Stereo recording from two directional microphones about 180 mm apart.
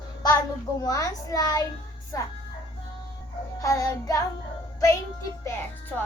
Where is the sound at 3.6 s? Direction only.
15° left (ahead or behind).